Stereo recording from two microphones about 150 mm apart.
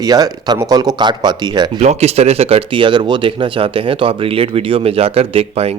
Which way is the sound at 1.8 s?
45° right (ahead or behind).